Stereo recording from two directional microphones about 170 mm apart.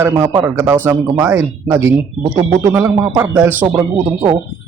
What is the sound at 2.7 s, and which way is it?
Speech, 10° right (ahead or behind).